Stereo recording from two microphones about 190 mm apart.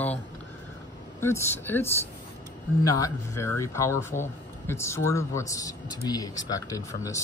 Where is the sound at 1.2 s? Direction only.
10° left (ahead or behind).